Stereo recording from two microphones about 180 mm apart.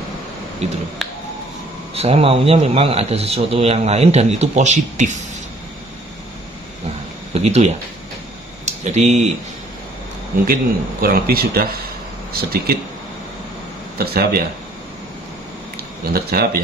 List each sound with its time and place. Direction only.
2.0 s a man's voice: 35° right (ahead or behind)
7.3 s a man's voice: 35° right (ahead or behind)
10.4 s speech: 55° right (ahead or behind)
13.9 s speech: 60° right (ahead or behind)
16.1 s speech: 55° right (ahead or behind)